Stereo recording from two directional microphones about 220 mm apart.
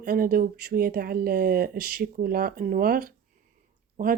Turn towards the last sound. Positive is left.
turn(degrees=-40)  # may be behind; listen again after turning